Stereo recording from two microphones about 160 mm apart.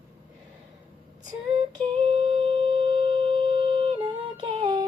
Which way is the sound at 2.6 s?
35° right (ahead or behind).